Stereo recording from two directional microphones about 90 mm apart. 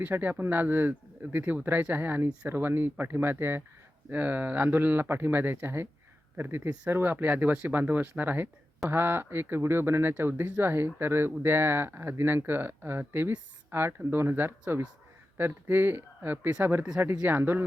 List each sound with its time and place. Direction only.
0.0 s speech: 20° right (ahead or behind)